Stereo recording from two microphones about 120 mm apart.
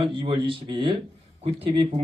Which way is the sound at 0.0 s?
45° right (ahead or behind).